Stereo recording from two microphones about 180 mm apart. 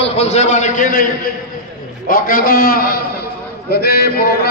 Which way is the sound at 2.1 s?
50° left (ahead or behind).